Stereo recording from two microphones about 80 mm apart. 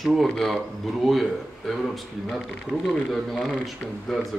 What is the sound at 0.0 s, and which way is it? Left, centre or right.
A man's voice, centre.